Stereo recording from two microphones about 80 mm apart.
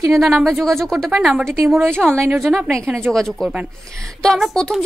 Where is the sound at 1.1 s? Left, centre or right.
Centre.